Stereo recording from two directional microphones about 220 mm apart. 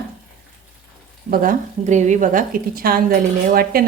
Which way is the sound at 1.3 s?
40° right (ahead or behind).